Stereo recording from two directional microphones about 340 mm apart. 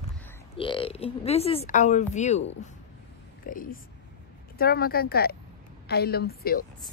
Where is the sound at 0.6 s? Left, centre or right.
Centre.